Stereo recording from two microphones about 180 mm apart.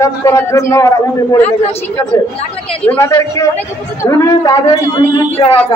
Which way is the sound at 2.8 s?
15° left (ahead or behind).